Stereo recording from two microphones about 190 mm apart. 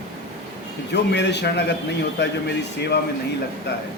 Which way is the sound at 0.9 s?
65° left (ahead or behind).